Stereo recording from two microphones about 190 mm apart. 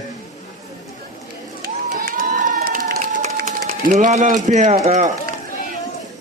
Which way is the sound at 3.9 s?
40° right (ahead or behind).